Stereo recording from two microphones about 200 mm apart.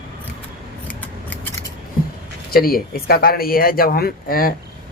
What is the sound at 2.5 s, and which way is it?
Speech, 50° left (ahead or behind).